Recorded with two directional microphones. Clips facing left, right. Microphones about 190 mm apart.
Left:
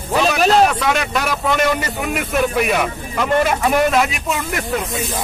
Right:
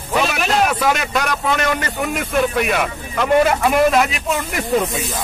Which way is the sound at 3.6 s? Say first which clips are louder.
Right 1 dB; centre (ahead or behind).